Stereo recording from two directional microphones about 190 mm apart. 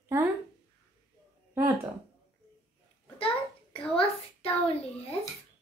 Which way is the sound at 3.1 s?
30° left (ahead or behind).